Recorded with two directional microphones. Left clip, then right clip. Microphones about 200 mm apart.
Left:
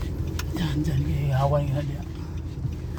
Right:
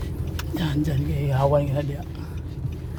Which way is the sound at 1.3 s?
50° right (ahead or behind).